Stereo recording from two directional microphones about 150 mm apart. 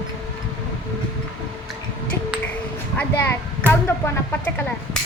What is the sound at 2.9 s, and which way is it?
A child's voice, 15° left (ahead or behind).